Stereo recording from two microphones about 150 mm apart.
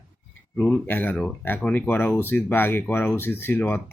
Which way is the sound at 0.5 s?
10° left (ahead or behind).